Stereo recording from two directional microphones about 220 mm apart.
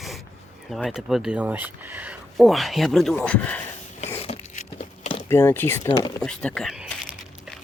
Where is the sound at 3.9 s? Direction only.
30° left (ahead or behind).